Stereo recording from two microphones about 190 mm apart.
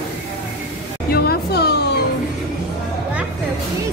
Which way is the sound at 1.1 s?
55° left (ahead or behind).